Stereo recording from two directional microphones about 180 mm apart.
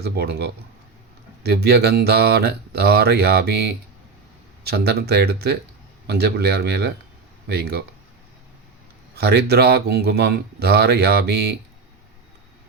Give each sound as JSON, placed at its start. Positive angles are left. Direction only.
{"t": 0.0, "sound": "speech", "side_deg": -60}
{"t": 9.1, "sound": "speech", "side_deg": -65}